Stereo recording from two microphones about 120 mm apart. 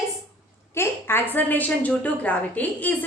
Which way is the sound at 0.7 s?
20° left (ahead or behind).